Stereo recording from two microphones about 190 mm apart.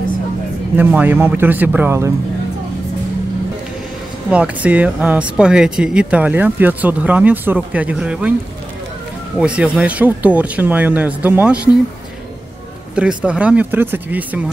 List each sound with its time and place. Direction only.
0.7 s speech: 10° right (ahead or behind)
4.3 s speech: 5° right (ahead or behind)
9.4 s speech: 5° right (ahead or behind)
12.9 s speech: 5° right (ahead or behind)